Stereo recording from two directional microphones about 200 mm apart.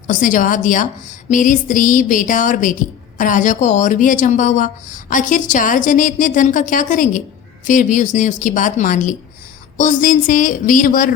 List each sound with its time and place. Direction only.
0.1 s a woman's voice: 40° left (ahead or behind)